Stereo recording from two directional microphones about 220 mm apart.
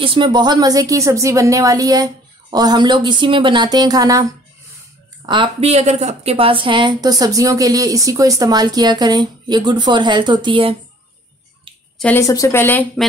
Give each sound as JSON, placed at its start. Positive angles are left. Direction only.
{"t": 0.0, "sound": "a woman's voice", "side_deg": -20}
{"t": 12.0, "sound": "a woman's voice", "side_deg": 10}